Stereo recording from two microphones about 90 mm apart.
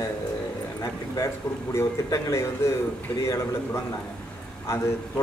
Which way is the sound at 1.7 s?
30° left (ahead or behind).